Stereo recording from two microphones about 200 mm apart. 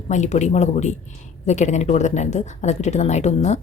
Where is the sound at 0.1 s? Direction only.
35° left (ahead or behind).